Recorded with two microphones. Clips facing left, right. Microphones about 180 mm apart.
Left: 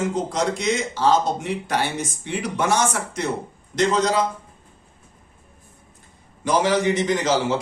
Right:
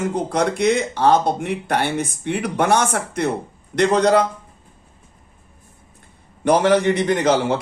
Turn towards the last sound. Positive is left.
turn(degrees=-60)  # may be behind; listen again after turning